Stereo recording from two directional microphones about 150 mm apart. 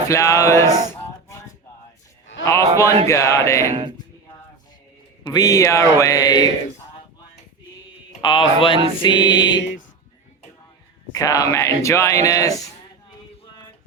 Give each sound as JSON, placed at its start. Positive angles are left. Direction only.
{"t": 0.1, "sound": "speech", "side_deg": 20}
{"t": 2.4, "sound": "speech", "side_deg": 20}
{"t": 5.2, "sound": "speech", "side_deg": 25}
{"t": 8.2, "sound": "music", "side_deg": 35}
{"t": 11.1, "sound": "speech", "side_deg": 25}